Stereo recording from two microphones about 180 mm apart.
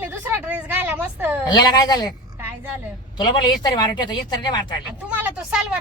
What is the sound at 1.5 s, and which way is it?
Speech, 20° left (ahead or behind).